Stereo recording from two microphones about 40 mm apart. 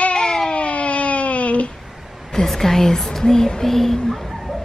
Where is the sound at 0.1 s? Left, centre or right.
Centre.